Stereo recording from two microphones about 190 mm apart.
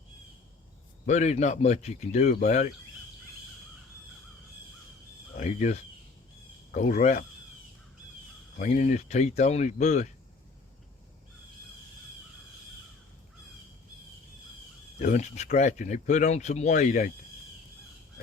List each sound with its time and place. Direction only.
1.0 s speech: 40° left (ahead or behind)
5.4 s speech: 40° left (ahead or behind)
8.5 s speech: 40° left (ahead or behind)
14.9 s speech: 40° left (ahead or behind)